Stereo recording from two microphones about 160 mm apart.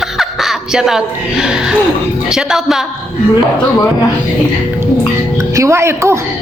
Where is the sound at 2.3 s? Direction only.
5° right (ahead or behind).